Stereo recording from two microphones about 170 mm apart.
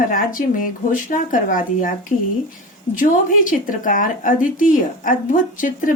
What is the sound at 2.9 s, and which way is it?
Speech, 55° left (ahead or behind).